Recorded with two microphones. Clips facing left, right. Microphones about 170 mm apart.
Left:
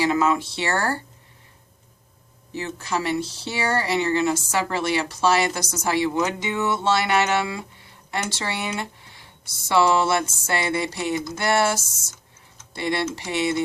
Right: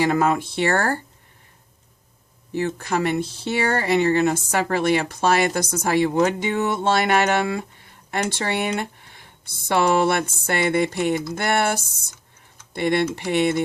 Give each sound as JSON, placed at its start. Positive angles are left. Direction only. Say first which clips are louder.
{"t": 0.0, "sound": "speech", "louder": "right 1 dB", "side_deg": -55}
{"t": 2.6, "sound": "speech", "louder": "right 4 dB", "side_deg": -55}